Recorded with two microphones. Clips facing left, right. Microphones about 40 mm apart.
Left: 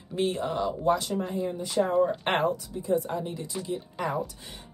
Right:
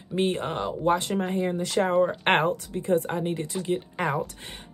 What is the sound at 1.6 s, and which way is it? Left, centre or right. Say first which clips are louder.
Speech: left 1 dB; right.